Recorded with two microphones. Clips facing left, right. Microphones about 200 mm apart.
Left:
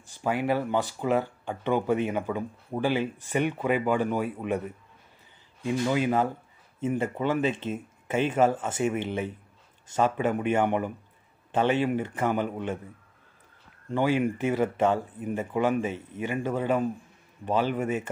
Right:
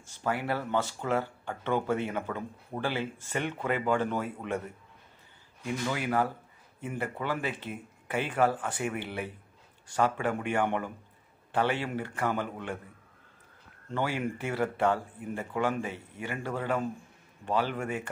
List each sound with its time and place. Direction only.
0.2 s speech: 15° left (ahead or behind)
13.8 s speech: 15° left (ahead or behind)